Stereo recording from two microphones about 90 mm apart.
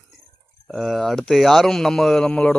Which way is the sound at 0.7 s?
5° left (ahead or behind).